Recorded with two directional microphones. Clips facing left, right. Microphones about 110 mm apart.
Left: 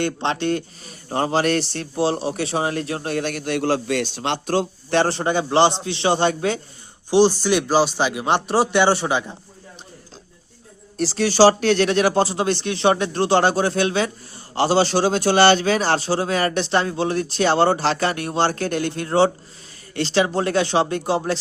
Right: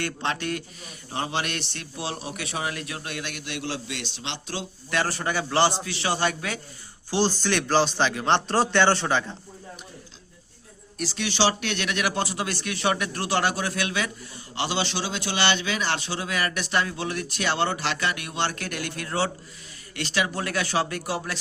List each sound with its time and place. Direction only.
0.0 s a man's voice: 25° left (ahead or behind); by 4.6 s 50° left (ahead or behind)
4.9 s a man's voice: 30° left (ahead or behind)
7.1 s a man's voice: 15° left (ahead or behind)
10.9 s a man's voice: 35° left (ahead or behind)